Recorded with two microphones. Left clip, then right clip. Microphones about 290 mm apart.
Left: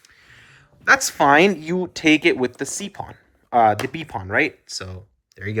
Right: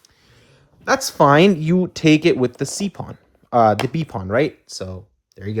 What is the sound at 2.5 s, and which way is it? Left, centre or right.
Speech, right.